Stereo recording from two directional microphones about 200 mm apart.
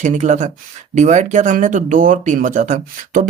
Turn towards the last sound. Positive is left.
turn(degrees=-40)  # may be behind; listen again after turning